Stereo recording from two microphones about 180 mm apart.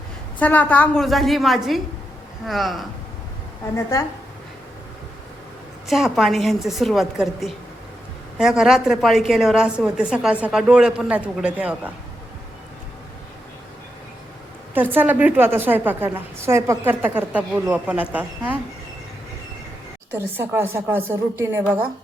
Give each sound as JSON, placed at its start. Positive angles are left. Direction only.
{"t": 0.3, "sound": "a woman's voice", "side_deg": 10}
{"t": 3.8, "sound": "a woman's voice", "side_deg": 15}
{"t": 5.9, "sound": "a woman's voice", "side_deg": 0}
{"t": 14.8, "sound": "a woman's voice", "side_deg": -10}
{"t": 20.1, "sound": "a woman's voice", "side_deg": -10}